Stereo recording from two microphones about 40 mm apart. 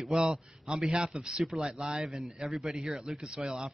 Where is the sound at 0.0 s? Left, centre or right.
Centre.